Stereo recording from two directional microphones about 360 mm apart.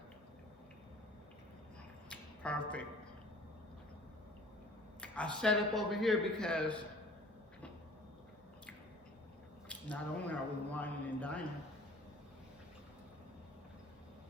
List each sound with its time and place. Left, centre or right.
2.0 s a sound: centre
4.9 s a man's voice: centre
9.6 s a man's voice: centre